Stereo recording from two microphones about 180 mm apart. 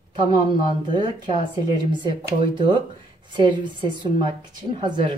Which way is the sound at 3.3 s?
25° right (ahead or behind).